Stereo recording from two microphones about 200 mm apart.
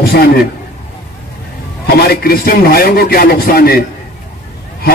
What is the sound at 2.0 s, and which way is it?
A man's voice, 50° left (ahead or behind).